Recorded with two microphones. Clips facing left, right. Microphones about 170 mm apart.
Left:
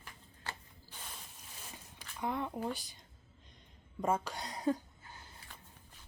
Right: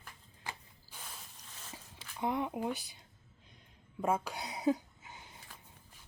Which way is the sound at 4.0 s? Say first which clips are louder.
Right 1 dB; 10° right (ahead or behind).